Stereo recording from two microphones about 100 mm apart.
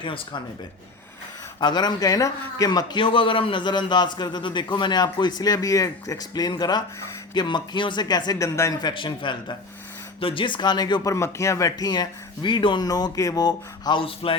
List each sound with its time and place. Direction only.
0.0 s speech: 55° left (ahead or behind)
1.6 s a man's voice: 45° left (ahead or behind)
3.0 s a man's voice: 60° left (ahead or behind); by 8.4 s 45° left (ahead or behind)
8.8 s a man's voice: 55° left (ahead or behind)
10.2 s a man's voice: 65° left (ahead or behind); by 11.1 s 45° left (ahead or behind)
11.1 s a man's voice: 30° left (ahead or behind)
14.0 s speech: 65° left (ahead or behind)